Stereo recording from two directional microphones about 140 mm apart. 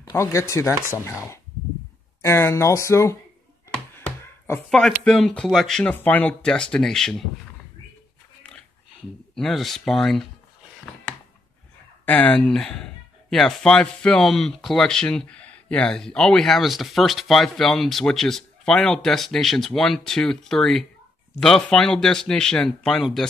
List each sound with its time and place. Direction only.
0.1 s speech: 20° left (ahead or behind)
2.2 s speech: 20° left (ahead or behind)
4.6 s speech: 5° left (ahead or behind)
9.3 s speech: 5° left (ahead or behind)
12.1 s speech: 10° left (ahead or behind)